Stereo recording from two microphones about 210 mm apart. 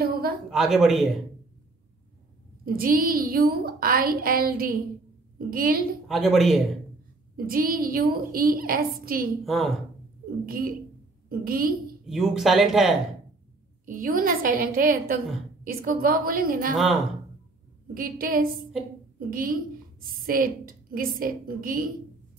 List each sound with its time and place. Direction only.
0.0 s a sound: 45° right (ahead or behind)
0.5 s speech: centre (ahead or behind)
2.6 s a woman's voice: 45° right (ahead or behind)
6.0 s speech: centre (ahead or behind)
7.3 s a woman's voice: 45° right (ahead or behind)
9.4 s speech: centre (ahead or behind)
10.4 s a woman's voice: 45° right (ahead or behind)
12.1 s speech: centre (ahead or behind)
13.8 s a woman's voice: 40° right (ahead or behind)
17.9 s a woman's voice: 45° right (ahead or behind)